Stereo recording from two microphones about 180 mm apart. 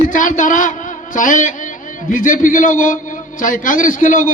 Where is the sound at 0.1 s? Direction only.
45° left (ahead or behind).